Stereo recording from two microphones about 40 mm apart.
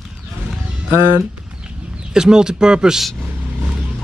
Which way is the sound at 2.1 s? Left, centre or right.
Centre.